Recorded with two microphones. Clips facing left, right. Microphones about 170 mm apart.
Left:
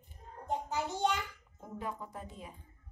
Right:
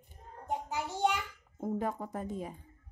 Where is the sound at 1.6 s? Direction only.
45° right (ahead or behind).